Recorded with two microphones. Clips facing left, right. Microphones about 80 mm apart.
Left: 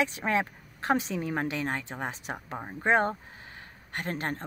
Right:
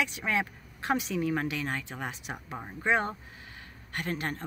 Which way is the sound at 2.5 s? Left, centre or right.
Left.